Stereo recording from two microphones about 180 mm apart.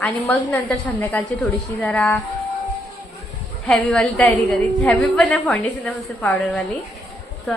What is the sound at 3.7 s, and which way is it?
A woman's voice, 5° left (ahead or behind).